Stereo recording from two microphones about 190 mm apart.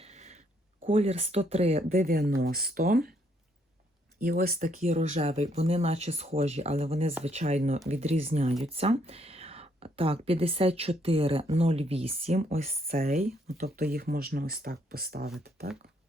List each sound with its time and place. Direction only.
0.0 s a sound: 35° right (ahead or behind)
0.9 s speech: 30° right (ahead or behind)
1.9 s speech: 50° right (ahead or behind)
4.2 s speech: 50° right (ahead or behind); by 7.1 s 30° right (ahead or behind)
7.1 s speech: 10° right (ahead or behind)
7.3 s speech: 35° right (ahead or behind)
13.7 s speech: 55° right (ahead or behind)
15.4 s beatboxing: 55° right (ahead or behind)